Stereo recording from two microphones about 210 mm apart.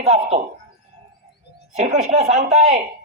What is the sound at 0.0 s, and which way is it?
Speech, 30° right (ahead or behind).